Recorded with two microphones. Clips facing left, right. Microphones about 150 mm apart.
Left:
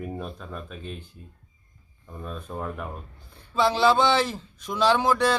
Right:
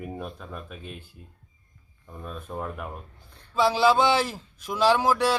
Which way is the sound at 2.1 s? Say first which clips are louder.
Left 1 dB; centre (ahead or behind).